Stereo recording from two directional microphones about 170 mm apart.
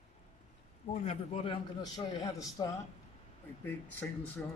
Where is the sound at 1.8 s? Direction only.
25° left (ahead or behind).